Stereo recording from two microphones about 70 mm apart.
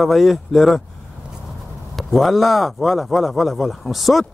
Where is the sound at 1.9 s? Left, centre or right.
Centre.